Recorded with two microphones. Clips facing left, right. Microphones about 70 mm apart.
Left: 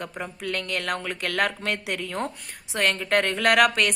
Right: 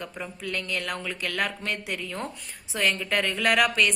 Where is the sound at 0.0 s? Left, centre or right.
Left.